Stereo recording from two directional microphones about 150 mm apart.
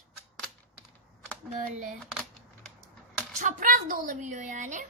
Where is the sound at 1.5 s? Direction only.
55° right (ahead or behind).